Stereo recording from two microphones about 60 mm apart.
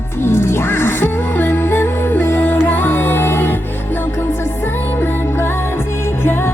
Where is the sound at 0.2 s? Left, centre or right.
Left.